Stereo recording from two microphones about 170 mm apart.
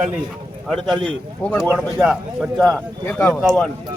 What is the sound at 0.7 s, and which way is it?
Speech, centre (ahead or behind).